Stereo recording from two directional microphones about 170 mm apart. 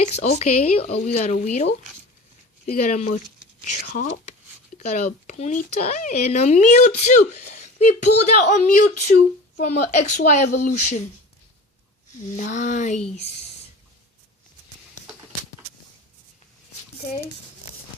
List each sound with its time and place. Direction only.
0.0 s speech: 45° left (ahead or behind)
2.6 s speech: 50° left (ahead or behind)
12.4 s speech: 45° left (ahead or behind)